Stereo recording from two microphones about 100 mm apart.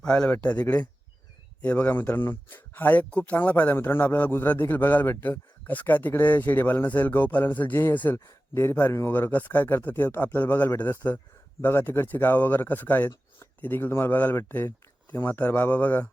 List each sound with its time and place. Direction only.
0.0 s speech: 10° left (ahead or behind)